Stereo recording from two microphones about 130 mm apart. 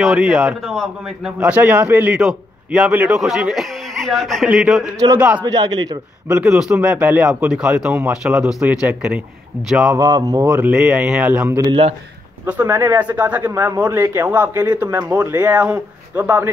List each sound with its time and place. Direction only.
0.0 s a man's voice: 5° right (ahead or behind)
2.1 s a man's voice: 5° right (ahead or behind)
3.2 s a man's voice: 5° right (ahead or behind)
5.4 s a man's voice: 30° right (ahead or behind)
6.2 s a man's voice: 10° right (ahead or behind)
9.9 s speech: 25° right (ahead or behind)
10.6 s a man's voice: 10° right (ahead or behind)
11.6 s a man's voice: 40° right (ahead or behind)
12.4 s a man's voice: 15° right (ahead or behind)